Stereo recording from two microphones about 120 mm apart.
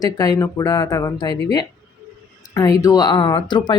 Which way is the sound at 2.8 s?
35° left (ahead or behind).